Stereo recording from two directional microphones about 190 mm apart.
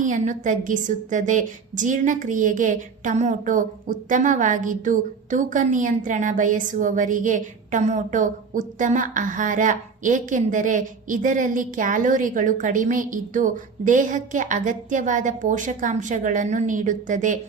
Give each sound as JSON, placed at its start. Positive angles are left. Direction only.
{"t": 0.0, "sound": "a woman's voice", "side_deg": -40}